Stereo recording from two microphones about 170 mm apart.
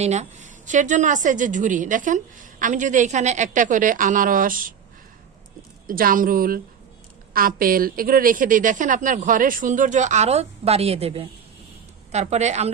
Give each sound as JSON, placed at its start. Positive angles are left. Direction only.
{"t": 0.0, "sound": "a woman's voice", "side_deg": -40}
{"t": 5.9, "sound": "a woman's voice", "side_deg": -55}